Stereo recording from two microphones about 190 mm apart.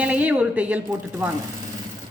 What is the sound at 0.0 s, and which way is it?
Speech, 5° right (ahead or behind).